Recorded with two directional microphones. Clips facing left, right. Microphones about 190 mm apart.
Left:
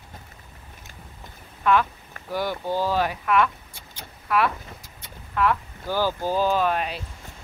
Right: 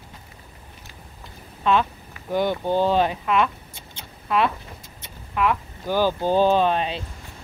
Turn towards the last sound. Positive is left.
turn(degrees=-25)  # may be behind; listen again after turning